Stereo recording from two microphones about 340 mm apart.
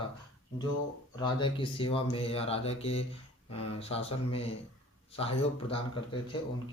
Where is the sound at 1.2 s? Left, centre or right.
Centre.